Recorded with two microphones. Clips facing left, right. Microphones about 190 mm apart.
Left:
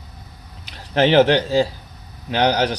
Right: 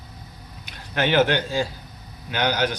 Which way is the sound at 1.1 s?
35° left (ahead or behind).